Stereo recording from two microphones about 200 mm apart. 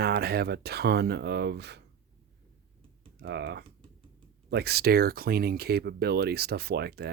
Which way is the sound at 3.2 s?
55° right (ahead or behind).